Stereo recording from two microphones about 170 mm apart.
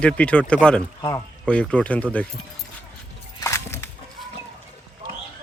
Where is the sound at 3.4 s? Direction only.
15° left (ahead or behind).